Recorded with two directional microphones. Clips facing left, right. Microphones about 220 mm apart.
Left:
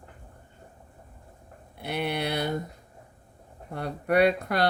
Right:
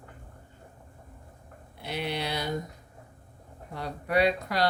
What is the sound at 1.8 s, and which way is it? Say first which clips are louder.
Speech: left 3 dB; 60° left (ahead or behind).